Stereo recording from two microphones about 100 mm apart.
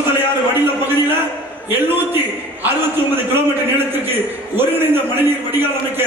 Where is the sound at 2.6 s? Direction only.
20° right (ahead or behind).